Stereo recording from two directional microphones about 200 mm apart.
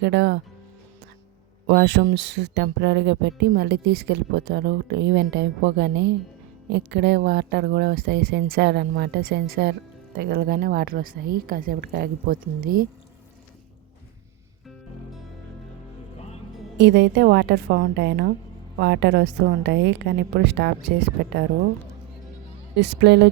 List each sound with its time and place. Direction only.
0.0 s speech: 60° right (ahead or behind)
1.6 s a woman's voice: 60° right (ahead or behind)
16.1 s music: 35° left (ahead or behind)
16.7 s speech: 60° right (ahead or behind)
22.7 s speech: 60° right (ahead or behind)